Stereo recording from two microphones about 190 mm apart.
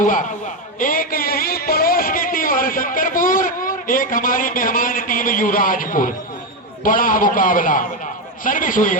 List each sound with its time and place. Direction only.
0.0 s a man's voice: 45° left (ahead or behind)
0.8 s a sound: 45° left (ahead or behind)
6.8 s a man's voice: 45° left (ahead or behind)